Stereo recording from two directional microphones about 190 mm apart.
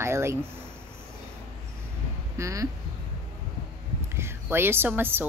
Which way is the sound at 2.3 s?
15° right (ahead or behind).